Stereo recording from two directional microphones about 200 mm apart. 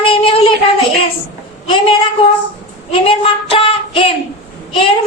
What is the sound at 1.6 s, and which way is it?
A woman's voice, 25° left (ahead or behind).